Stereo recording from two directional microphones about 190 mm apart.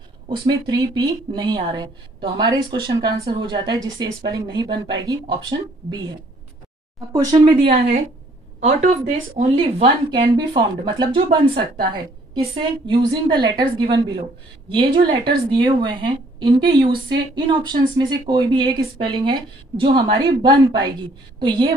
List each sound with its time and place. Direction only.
0.5 s a woman's voice: 20° right (ahead or behind)
7.1 s a woman's voice: 25° right (ahead or behind)
7.6 s a woman's voice: 45° right (ahead or behind); by 11.5 s 25° right (ahead or behind)
12.5 s a woman's voice: 25° right (ahead or behind)